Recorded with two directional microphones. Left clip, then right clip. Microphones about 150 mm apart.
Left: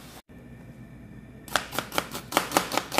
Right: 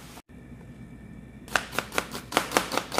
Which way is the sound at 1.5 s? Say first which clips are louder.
Right 1 dB; 5° right (ahead or behind).